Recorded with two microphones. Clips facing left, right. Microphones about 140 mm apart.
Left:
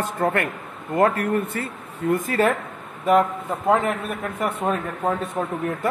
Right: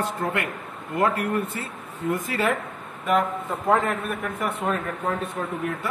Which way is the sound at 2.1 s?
45° left (ahead or behind).